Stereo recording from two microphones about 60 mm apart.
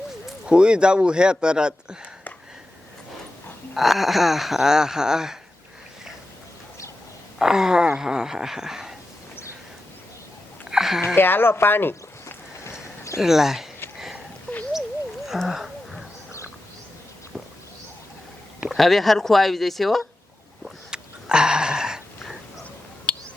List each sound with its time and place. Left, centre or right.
0.4 s speech: centre
3.8 s speech: centre
7.3 s speech: centre
10.7 s a sound: centre
11.0 s speech: left
13.1 s speech: centre
15.4 s a sound: centre
18.8 s speech: centre
20.7 s a sound: centre